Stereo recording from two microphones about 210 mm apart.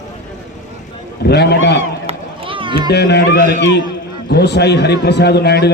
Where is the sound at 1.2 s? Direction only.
50° left (ahead or behind).